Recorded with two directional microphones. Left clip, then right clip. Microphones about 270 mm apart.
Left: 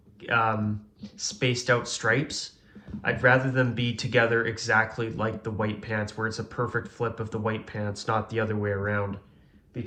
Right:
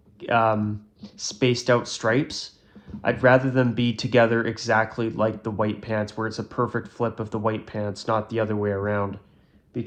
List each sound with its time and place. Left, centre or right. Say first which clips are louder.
0.2 s speech: right 4 dB; centre